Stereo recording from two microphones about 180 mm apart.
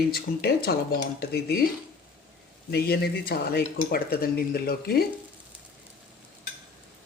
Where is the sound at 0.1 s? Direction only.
60° left (ahead or behind).